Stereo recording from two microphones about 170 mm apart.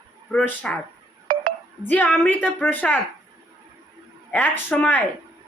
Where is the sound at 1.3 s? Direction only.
55° right (ahead or behind).